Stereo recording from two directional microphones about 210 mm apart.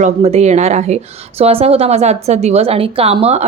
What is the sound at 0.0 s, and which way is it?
A woman's voice, 30° right (ahead or behind).